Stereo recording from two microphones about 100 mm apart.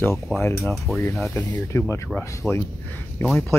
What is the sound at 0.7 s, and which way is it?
Speech, centre (ahead or behind).